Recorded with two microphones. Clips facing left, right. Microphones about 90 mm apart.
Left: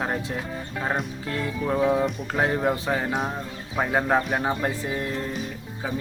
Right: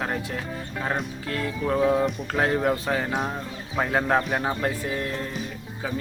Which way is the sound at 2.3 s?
10° left (ahead or behind).